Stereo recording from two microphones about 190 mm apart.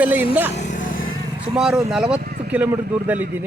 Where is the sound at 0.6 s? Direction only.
40° left (ahead or behind).